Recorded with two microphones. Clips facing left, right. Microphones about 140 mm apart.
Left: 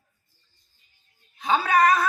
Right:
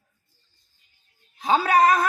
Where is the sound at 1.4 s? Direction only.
25° right (ahead or behind).